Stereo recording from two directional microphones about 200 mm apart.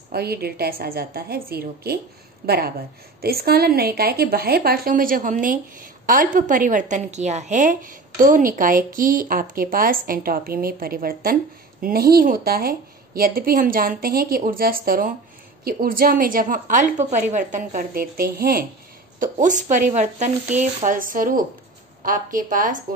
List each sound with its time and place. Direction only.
0.1 s a woman's voice: 50° right (ahead or behind)